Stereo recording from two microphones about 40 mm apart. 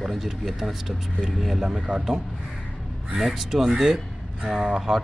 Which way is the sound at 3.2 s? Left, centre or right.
Centre.